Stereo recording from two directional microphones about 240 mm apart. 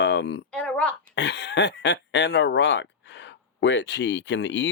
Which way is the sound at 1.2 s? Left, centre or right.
Left.